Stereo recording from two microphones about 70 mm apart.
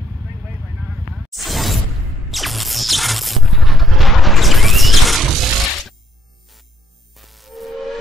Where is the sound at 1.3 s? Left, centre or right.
Centre.